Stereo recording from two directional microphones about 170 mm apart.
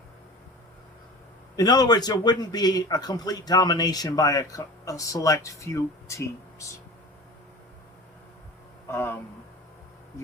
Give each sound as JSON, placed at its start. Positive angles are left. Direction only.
{"t": 1.5, "sound": "a man's voice", "side_deg": 25}
{"t": 8.9, "sound": "speech", "side_deg": 15}